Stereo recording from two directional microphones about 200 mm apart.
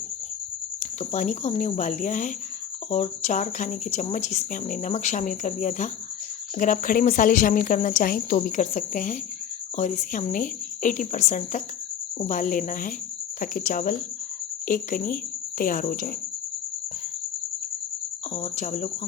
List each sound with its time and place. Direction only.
0.8 s speech: 35° left (ahead or behind)
18.3 s speech: 35° left (ahead or behind)